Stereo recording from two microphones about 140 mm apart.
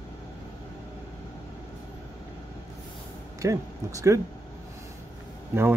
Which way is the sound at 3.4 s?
25° right (ahead or behind).